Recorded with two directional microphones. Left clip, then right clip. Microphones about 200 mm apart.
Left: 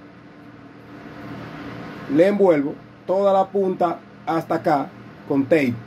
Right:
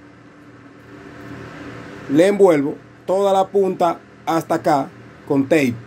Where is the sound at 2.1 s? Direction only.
40° right (ahead or behind).